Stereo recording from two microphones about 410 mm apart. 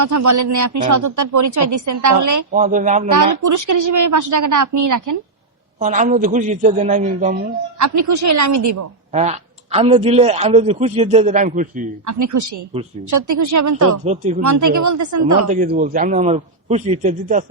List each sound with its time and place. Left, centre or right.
0.0 s a woman's voice: right
2.5 s a man's voice: centre
3.1 s a woman's voice: right
5.8 s speech: centre
7.8 s a woman's voice: right
9.1 s speech: centre
12.0 s a woman's voice: right
14.0 s speech: centre
14.4 s a woman's voice: right
15.4 s speech: centre